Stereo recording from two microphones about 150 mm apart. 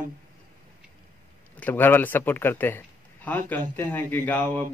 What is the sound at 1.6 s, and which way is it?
Speech, 10° left (ahead or behind).